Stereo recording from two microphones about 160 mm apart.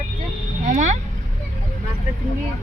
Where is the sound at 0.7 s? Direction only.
50° right (ahead or behind).